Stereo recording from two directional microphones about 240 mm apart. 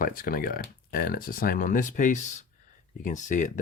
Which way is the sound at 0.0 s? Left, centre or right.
Left.